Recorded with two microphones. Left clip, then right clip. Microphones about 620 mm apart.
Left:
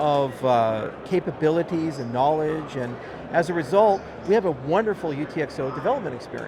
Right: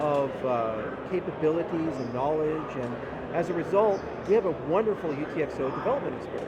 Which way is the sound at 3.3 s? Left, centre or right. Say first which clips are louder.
Left 6 dB; left.